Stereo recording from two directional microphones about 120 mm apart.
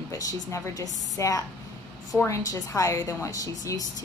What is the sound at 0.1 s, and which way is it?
A woman's voice, 25° left (ahead or behind).